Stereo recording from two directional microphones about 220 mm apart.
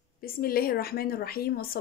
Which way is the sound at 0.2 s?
45° left (ahead or behind).